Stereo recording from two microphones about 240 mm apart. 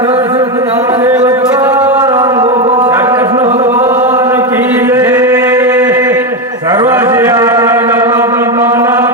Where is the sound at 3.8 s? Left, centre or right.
Centre.